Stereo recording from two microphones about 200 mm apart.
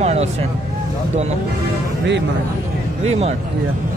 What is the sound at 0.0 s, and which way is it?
Vehicle, 35° right (ahead or behind).